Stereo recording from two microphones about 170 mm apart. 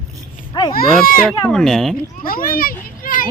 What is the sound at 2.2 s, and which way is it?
A child's voice, 60° left (ahead or behind).